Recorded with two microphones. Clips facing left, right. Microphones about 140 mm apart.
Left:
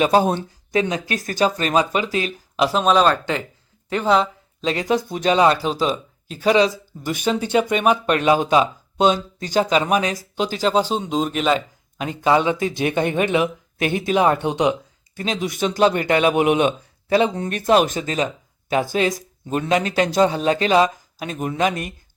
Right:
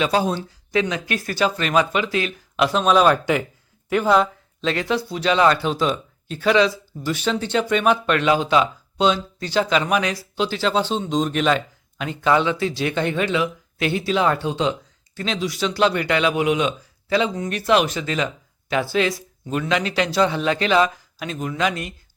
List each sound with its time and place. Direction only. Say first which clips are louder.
0.3 s speech: left 2 dB; 50° left (ahead or behind)
2.6 s speech: even; centre (ahead or behind)
4.7 s speech: left 2 dB; 40° left (ahead or behind)
5.9 s a sound: even; 5° left (ahead or behind)
6.4 s speech: left 1 dB; 40° left (ahead or behind)
7.0 s speech: left 1 dB; 15° left (ahead or behind)
8.0 s speech: left 2 dB; 40° left (ahead or behind)
10.8 s speech: left 1 dB; 10° left (ahead or behind)
12.0 s speech: left 1 dB; 15° left (ahead or behind)
14.4 s a sound: left 3 dB; 15° left (ahead or behind)
15.3 s speech: left 1 dB; 50° left (ahead or behind)
16.5 s speech: left 3 dB; 55° left (ahead or behind)